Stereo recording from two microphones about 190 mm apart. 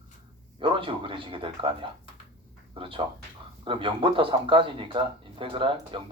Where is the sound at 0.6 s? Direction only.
25° right (ahead or behind).